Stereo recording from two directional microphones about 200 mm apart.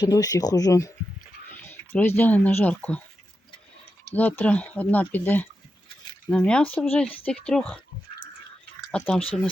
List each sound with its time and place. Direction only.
0.0 s speech: 20° left (ahead or behind)
4.1 s speech: 10° left (ahead or behind)
8.9 s speech: 5° left (ahead or behind)